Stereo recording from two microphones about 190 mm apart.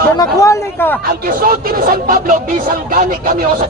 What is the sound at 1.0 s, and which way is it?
Speech, 50° right (ahead or behind).